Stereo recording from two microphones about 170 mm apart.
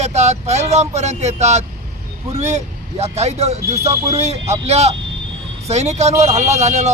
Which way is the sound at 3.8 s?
20° right (ahead or behind).